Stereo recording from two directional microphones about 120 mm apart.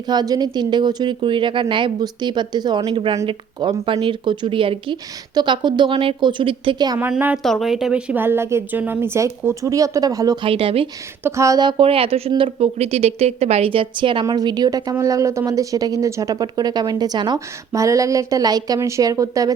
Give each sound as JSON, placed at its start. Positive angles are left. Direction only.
{"t": 0.1, "sound": "a woman's voice", "side_deg": -35}
{"t": 7.1, "sound": "a woman's voice", "side_deg": -15}
{"t": 7.4, "sound": "a woman's voice", "side_deg": 0}
{"t": 10.4, "sound": "speech", "side_deg": -50}
{"t": 11.2, "sound": "speech", "side_deg": -25}
{"t": 11.6, "sound": "a woman's voice", "side_deg": -50}